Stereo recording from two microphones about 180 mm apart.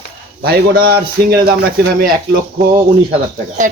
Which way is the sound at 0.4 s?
60° right (ahead or behind).